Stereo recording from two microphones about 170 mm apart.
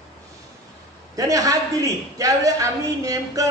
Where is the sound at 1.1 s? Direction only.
20° right (ahead or behind).